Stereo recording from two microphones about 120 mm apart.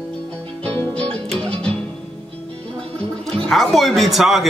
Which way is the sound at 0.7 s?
10° left (ahead or behind).